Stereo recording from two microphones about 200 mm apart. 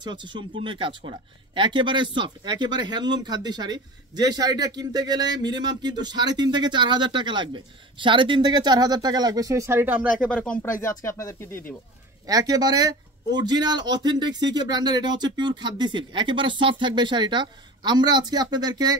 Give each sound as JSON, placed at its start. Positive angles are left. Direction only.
{"t": 0.0, "sound": "speech", "side_deg": -25}
{"t": 10.2, "sound": "speech", "side_deg": 5}
{"t": 12.3, "sound": "speech", "side_deg": -20}